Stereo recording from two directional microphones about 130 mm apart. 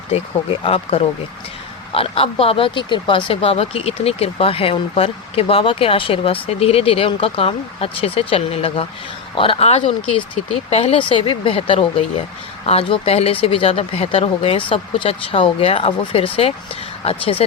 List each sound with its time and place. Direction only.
0.1 s speech: 45° left (ahead or behind)